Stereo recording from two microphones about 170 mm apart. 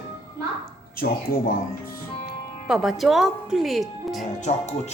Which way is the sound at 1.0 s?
70° left (ahead or behind).